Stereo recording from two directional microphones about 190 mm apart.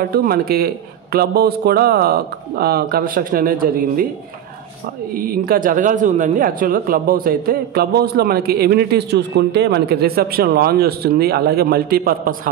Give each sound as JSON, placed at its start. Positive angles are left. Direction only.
{"t": 0.1, "sound": "speech", "side_deg": -55}
{"t": 5.1, "sound": "speech", "side_deg": -50}